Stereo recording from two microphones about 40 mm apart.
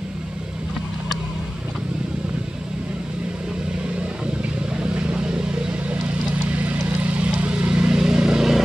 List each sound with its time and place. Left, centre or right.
4.7 s vehicle: right
6.5 s vehicle: right